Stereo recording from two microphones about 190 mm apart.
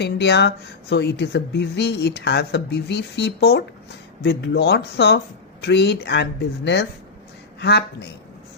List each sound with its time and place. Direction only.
0.0 s speech: 60° left (ahead or behind)
7.6 s speech: 60° left (ahead or behind)